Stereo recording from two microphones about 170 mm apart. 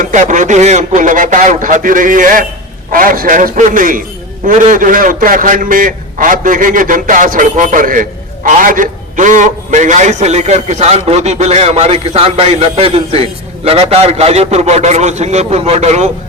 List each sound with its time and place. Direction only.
0.0 s a man's voice: 50° right (ahead or behind)